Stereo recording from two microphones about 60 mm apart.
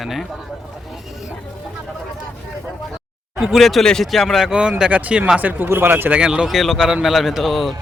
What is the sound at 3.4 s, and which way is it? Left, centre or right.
Speech, centre.